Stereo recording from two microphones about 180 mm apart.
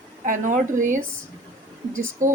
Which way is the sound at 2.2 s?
45° right (ahead or behind).